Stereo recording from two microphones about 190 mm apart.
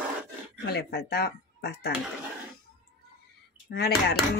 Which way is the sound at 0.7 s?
60° left (ahead or behind).